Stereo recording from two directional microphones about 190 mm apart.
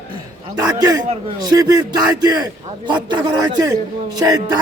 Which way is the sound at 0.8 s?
20° right (ahead or behind).